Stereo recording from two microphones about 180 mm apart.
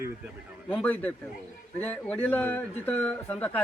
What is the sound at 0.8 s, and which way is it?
Speech, 10° left (ahead or behind).